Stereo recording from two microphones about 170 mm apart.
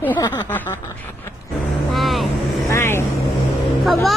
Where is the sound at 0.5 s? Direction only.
10° left (ahead or behind).